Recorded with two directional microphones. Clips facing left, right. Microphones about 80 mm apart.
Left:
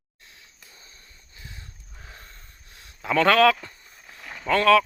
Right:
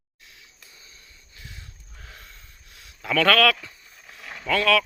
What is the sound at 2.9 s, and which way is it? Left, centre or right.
Speech, left.